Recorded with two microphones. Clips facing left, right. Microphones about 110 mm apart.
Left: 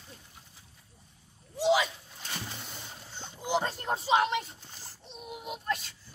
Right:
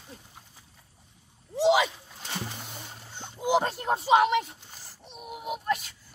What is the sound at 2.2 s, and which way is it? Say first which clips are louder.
Music: right 4 dB; 25° right (ahead or behind).